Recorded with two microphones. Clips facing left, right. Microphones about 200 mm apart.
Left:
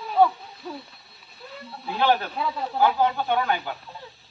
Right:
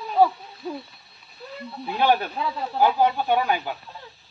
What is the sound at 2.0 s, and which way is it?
Speech, 15° right (ahead or behind).